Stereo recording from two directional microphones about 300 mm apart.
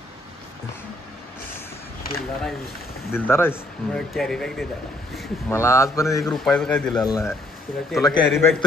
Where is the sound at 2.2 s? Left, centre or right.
Centre.